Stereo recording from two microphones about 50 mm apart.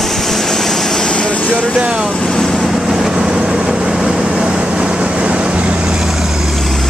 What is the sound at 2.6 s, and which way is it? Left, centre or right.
Vehicle, centre.